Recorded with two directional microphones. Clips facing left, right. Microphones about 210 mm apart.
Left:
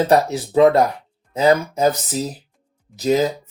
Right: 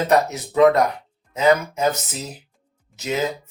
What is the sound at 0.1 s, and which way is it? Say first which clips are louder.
Speech: left 3 dB; 30° left (ahead or behind).